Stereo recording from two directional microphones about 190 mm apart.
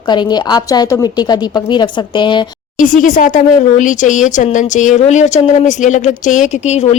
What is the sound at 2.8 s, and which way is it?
Speech, 45° left (ahead or behind).